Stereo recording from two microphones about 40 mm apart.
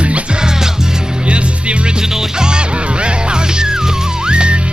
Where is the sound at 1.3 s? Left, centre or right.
Right.